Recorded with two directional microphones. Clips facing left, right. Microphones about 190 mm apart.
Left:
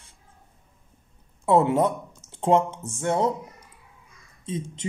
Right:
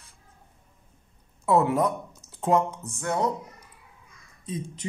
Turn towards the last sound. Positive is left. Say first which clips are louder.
# left 3 dB
turn(degrees=25)  # may be behind; listen again after turning